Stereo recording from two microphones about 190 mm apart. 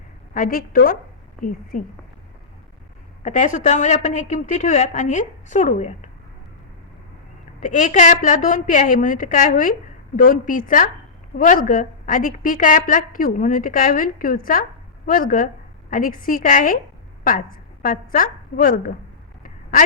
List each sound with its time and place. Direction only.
0.3 s a woman's voice: 45° left (ahead or behind)
3.2 s a woman's voice: 40° left (ahead or behind)
7.6 s a woman's voice: 40° left (ahead or behind)